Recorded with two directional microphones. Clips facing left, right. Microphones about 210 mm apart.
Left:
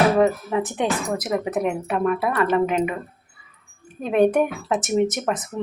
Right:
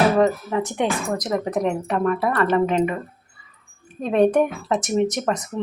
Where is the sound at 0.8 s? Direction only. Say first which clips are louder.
Right 1 dB; 20° left (ahead or behind).